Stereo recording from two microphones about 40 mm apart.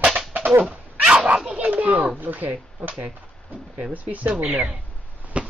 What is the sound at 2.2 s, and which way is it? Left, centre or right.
Speech, right.